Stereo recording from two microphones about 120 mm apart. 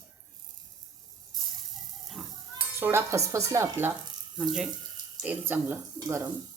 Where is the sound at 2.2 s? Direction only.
5° right (ahead or behind).